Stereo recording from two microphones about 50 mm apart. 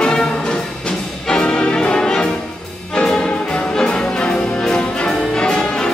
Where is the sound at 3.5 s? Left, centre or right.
Centre.